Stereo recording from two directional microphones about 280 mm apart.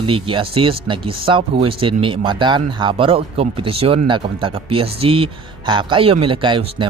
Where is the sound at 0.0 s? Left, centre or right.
Centre.